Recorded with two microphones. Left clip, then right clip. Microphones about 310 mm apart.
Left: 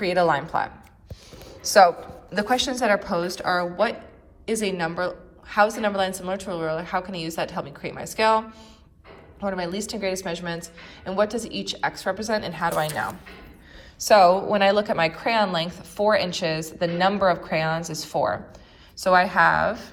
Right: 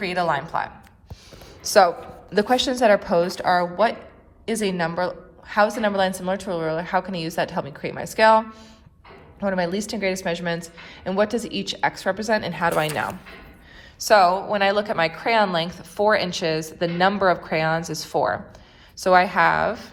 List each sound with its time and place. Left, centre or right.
0.1 s speech: right
2.3 s a woman's voice: centre
9.4 s a woman's voice: centre
14.0 s a woman's voice: centre